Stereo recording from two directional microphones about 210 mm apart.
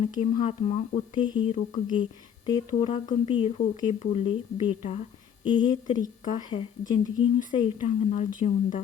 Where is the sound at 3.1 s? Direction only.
20° left (ahead or behind).